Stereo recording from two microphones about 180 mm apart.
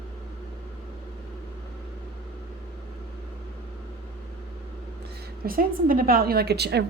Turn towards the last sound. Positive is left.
turn(degrees=-65)  # may be behind; listen again after turning